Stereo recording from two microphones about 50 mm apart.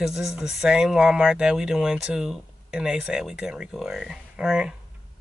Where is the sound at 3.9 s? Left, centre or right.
Centre.